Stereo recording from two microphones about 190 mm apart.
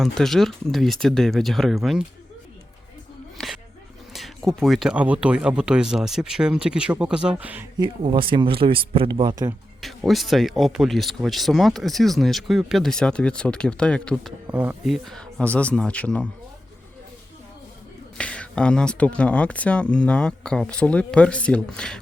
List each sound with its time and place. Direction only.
0.0 s speech: centre (ahead or behind)
3.4 s a sound: centre (ahead or behind)
4.1 s speech: centre (ahead or behind)
7.8 s speech: 25° right (ahead or behind)
9.8 s speech: centre (ahead or behind)
14.4 s speech: 10° right (ahead or behind)
14.9 s speech: centre (ahead or behind)
18.2 s speech: 5° left (ahead or behind)